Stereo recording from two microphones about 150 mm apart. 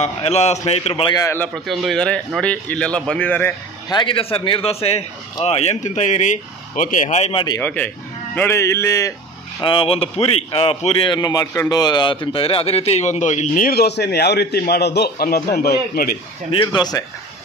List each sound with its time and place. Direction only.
0.0 s speech: 45° left (ahead or behind)
1.2 s speech: 15° left (ahead or behind)
1.5 s speech: centre (ahead or behind)
3.9 s speech: 35° left (ahead or behind)
7.6 s a man's voice: 10° left (ahead or behind)
9.6 s a man's voice: 35° left (ahead or behind); by 13.7 s 50° left (ahead or behind)
13.7 s a man's voice: 90° left
16.5 s a man's voice: 30° left (ahead or behind)